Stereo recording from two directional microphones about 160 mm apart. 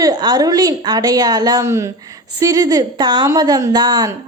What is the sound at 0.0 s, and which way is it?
A woman's voice, 25° right (ahead or behind).